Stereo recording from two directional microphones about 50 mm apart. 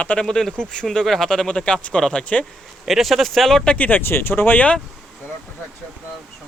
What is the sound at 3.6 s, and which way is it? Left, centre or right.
Speech, left.